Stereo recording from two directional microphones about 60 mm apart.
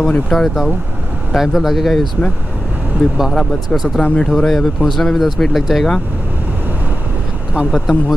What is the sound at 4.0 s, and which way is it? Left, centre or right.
Speech, centre.